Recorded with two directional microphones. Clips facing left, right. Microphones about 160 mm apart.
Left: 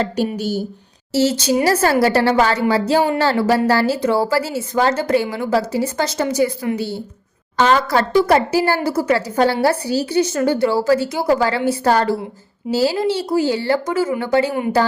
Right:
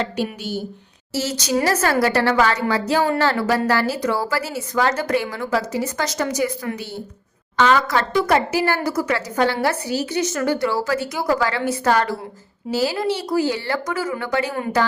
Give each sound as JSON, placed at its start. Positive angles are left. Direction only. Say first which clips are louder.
{"t": 0.3, "sound": "a woman's voice", "louder": "left 6 dB", "side_deg": 40}
{"t": 1.1, "sound": "a woman's voice", "louder": "left 6 dB", "side_deg": 30}